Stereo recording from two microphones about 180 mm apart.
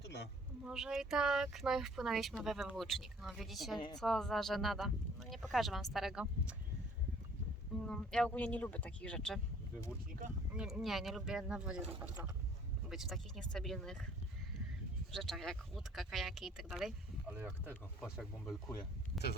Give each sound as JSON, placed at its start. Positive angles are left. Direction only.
{"t": 0.0, "sound": "a sound", "side_deg": 70}
{"t": 0.6, "sound": "speech", "side_deg": -5}
{"t": 7.9, "sound": "speech", "side_deg": 5}
{"t": 10.5, "sound": "speech", "side_deg": -5}
{"t": 12.9, "sound": "speech", "side_deg": 0}
{"t": 15.1, "sound": "speech", "side_deg": 0}
{"t": 19.1, "sound": "speech", "side_deg": 0}